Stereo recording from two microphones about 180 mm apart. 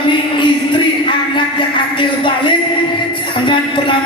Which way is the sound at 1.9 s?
25° left (ahead or behind).